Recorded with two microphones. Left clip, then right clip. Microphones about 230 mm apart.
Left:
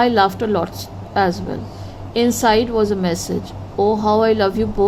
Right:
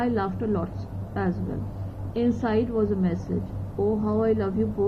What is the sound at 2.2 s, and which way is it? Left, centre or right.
Speech, left.